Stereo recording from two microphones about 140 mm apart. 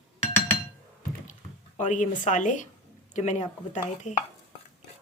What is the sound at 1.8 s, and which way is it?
A woman's voice, 60° left (ahead or behind).